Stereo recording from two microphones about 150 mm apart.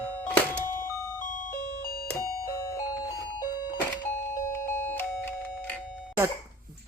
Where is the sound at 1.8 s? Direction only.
85° left.